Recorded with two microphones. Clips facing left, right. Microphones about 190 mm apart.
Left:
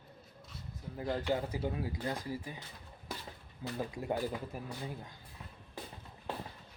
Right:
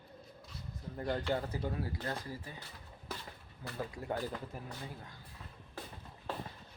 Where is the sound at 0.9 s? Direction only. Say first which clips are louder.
Left 1 dB; 5° left (ahead or behind).